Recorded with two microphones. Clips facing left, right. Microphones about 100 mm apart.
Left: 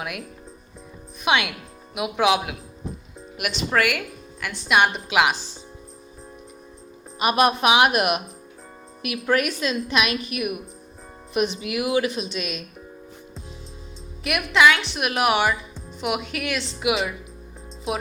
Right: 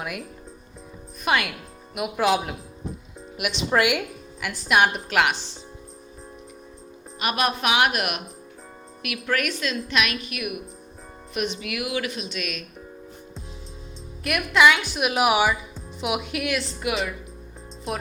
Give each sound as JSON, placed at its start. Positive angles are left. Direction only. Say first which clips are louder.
{"t": 0.0, "sound": "a woman's voice", "louder": "even", "side_deg": 0}
{"t": 3.7, "sound": "speech", "louder": "right 1 dB", "side_deg": -15}
{"t": 5.0, "sound": "a woman's voice", "louder": "left 2 dB", "side_deg": 5}
{"t": 7.2, "sound": "a woman's voice", "louder": "left 5 dB", "side_deg": 20}
{"t": 14.3, "sound": "a woman's voice", "louder": "even", "side_deg": 0}